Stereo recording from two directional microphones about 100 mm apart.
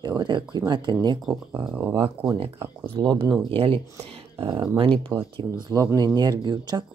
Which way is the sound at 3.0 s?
45° right (ahead or behind).